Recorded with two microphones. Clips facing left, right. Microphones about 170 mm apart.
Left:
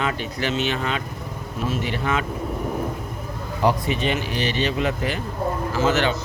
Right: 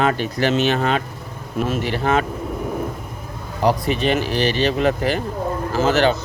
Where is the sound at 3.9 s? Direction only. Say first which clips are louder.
Right 5 dB; 35° right (ahead or behind).